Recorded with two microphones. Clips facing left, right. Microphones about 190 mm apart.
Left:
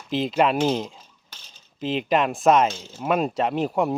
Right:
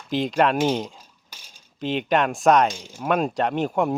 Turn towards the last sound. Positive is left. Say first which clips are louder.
# even
turn(degrees=0)  # may be behind; listen again after turning